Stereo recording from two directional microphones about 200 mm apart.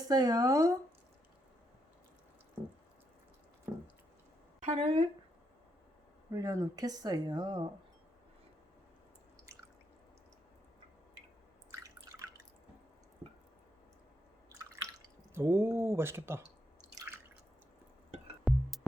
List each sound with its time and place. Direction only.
0.1 s speech: 20° right (ahead or behind)
4.6 s speech: 35° right (ahead or behind)
6.3 s speech: 15° right (ahead or behind)
11.7 s drip: 15° right (ahead or behind)
14.5 s drip: 15° right (ahead or behind)
18.4 s music: centre (ahead or behind)